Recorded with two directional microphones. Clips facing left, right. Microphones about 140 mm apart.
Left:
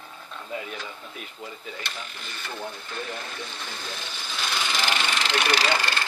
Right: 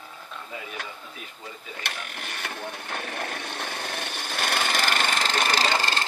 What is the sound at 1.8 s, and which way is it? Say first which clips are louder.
Vehicle: right 1 dB; 65° right (ahead or behind).